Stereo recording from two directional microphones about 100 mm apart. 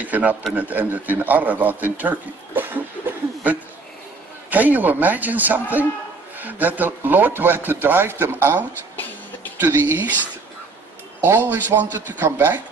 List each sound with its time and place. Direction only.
0.0 s a man's voice: 15° right (ahead or behind)
4.5 s a man's voice: 15° right (ahead or behind)
11.2 s a man's voice: 20° right (ahead or behind)